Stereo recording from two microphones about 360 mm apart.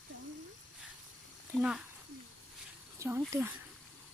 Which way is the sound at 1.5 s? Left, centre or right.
Centre.